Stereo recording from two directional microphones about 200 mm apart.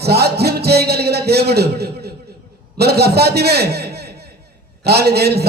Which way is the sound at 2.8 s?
55° right (ahead or behind).